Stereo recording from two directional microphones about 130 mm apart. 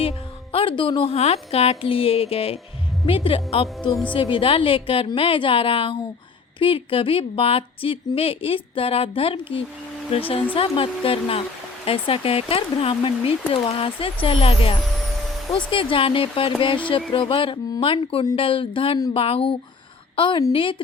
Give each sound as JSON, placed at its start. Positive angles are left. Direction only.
{"t": 0.0, "sound": "a woman's voice", "side_deg": 45}